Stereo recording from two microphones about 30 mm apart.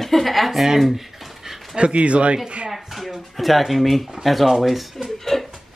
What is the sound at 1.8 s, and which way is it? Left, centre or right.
Speech, right.